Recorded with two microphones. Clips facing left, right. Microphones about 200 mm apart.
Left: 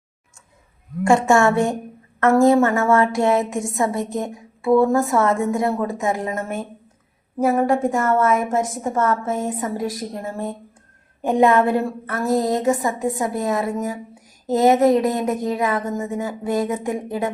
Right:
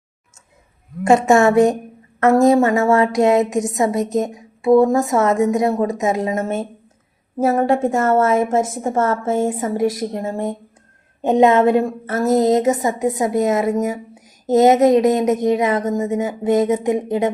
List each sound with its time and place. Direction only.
1.0 s a woman's voice: 20° right (ahead or behind)